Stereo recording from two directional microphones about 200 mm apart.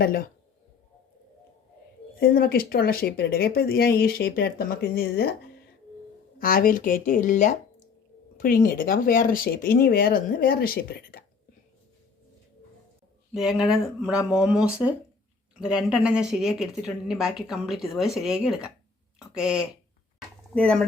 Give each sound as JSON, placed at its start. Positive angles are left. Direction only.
{"t": 2.2, "sound": "speech", "side_deg": 50}
{"t": 6.4, "sound": "speech", "side_deg": 45}
{"t": 13.3, "sound": "speech", "side_deg": -5}